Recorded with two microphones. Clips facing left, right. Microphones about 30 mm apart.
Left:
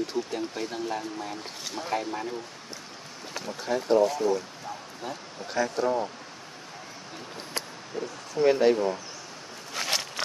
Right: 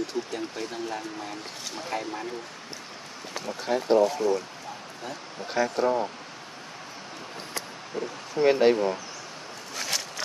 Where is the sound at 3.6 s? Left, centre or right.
Centre.